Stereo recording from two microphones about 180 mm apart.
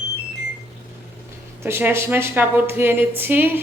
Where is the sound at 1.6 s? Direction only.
15° right (ahead or behind).